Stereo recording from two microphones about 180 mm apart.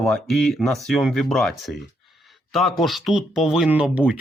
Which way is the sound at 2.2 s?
Centre (ahead or behind).